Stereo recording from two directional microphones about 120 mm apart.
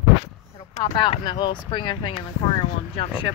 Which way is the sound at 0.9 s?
40° left (ahead or behind).